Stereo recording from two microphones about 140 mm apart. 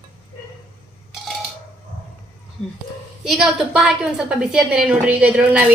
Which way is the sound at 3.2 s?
Centre (ahead or behind).